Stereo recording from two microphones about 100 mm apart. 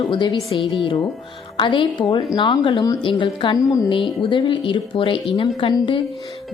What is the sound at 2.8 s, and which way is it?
Speech, 40° left (ahead or behind).